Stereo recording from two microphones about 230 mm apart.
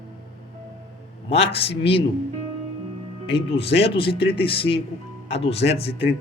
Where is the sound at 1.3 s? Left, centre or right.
Left.